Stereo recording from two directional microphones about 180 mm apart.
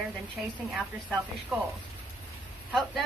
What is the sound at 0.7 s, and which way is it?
Speech, centre (ahead or behind).